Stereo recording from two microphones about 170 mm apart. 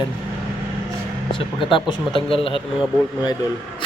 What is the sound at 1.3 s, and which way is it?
Speech, 30° left (ahead or behind).